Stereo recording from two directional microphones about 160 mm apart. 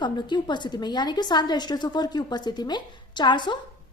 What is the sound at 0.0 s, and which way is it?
A woman's voice, 30° left (ahead or behind).